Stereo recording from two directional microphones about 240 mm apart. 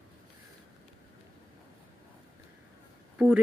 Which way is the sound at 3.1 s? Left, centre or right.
Centre.